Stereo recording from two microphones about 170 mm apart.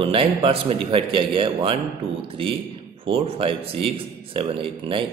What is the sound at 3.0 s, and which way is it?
A man's voice, 30° right (ahead or behind).